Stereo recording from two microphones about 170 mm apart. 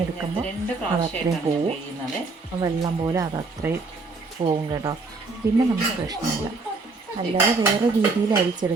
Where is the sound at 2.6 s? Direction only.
20° right (ahead or behind).